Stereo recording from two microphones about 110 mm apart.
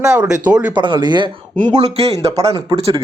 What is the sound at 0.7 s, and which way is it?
Speech, 45° right (ahead or behind).